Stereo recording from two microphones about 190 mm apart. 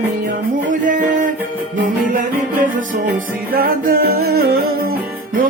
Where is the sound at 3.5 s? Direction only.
50° right (ahead or behind).